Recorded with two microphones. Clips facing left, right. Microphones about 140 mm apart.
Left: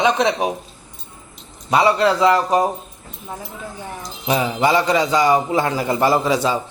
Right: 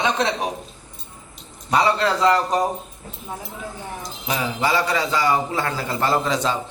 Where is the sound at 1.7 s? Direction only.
10° left (ahead or behind).